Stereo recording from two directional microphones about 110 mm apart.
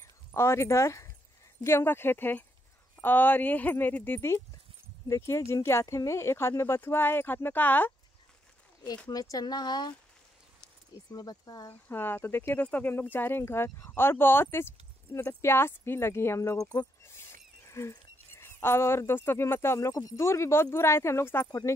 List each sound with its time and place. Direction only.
0.3 s speech: 25° left (ahead or behind)
9.1 s speech: 35° left (ahead or behind)
11.9 s speech: 20° left (ahead or behind); by 16.8 s 35° left (ahead or behind)
17.0 s speech: 25° left (ahead or behind)